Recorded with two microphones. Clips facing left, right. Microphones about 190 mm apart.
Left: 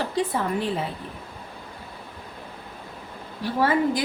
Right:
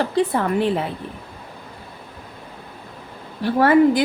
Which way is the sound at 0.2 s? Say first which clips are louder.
Right 5 dB; 65° right (ahead or behind).